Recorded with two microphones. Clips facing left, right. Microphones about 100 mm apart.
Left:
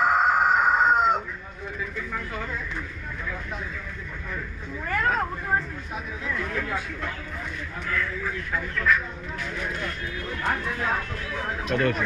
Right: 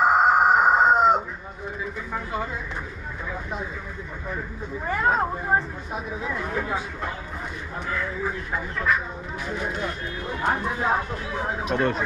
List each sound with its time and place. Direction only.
0.0 s chicken: 20° right (ahead or behind)
2.0 s a sound: 20° right (ahead or behind)
4.8 s speech: 20° right (ahead or behind)